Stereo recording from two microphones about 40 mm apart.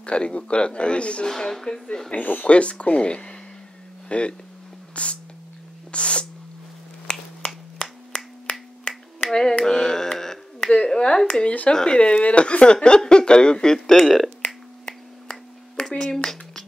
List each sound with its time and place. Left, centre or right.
0.0 s speech: left
1.2 s speech: centre
4.9 s a sound: left
5.9 s sneeze: left
7.1 s finger snapping: centre
9.7 s carnatic music: centre
10.9 s speech: centre
11.4 s speech: left
11.7 s speech: left
13.8 s speech: centre
14.9 s finger snapping: centre